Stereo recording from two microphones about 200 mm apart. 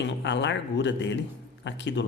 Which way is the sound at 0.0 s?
60° left (ahead or behind).